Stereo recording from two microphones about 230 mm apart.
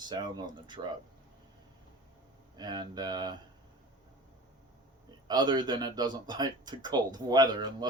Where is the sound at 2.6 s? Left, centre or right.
Centre.